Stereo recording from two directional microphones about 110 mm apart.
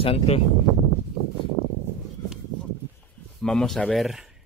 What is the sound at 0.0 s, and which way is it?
Speech, 60° left (ahead or behind).